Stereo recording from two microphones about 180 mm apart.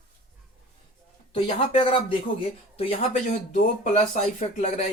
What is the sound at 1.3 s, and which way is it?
Speech, 30° left (ahead or behind).